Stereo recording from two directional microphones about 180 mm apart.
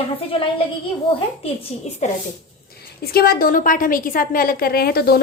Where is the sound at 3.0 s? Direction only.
60° left (ahead or behind).